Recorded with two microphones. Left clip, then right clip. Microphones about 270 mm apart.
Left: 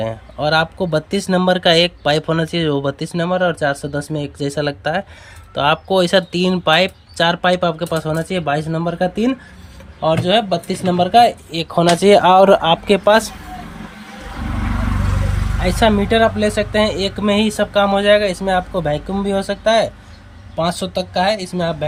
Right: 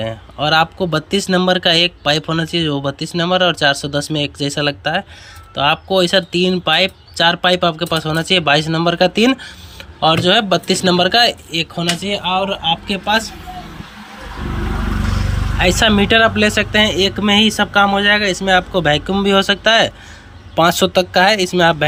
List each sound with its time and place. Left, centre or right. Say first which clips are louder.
0.0 s speech: even; centre
12.2 s speech: left 6 dB; left
12.6 s speech: left 5 dB; centre
15.6 s speech: right 2 dB; centre